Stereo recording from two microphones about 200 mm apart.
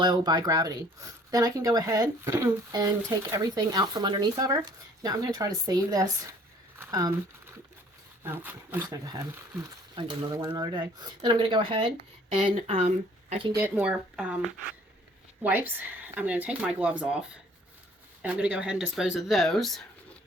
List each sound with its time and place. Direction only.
0.0 s speech: 25° right (ahead or behind)
6.7 s a sound: 15° right (ahead or behind)
8.2 s speech: 10° right (ahead or behind)
13.6 s speech: 10° right (ahead or behind)
15.4 s speech: 10° right (ahead or behind)
18.2 s speech: 5° right (ahead or behind)